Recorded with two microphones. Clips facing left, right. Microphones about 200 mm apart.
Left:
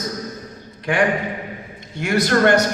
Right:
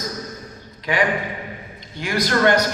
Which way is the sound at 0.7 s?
55° left (ahead or behind).